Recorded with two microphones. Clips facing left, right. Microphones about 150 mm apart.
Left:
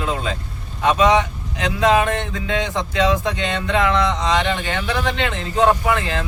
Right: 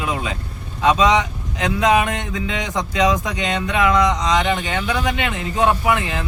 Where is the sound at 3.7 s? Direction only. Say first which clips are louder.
Right 1 dB; 25° left (ahead or behind).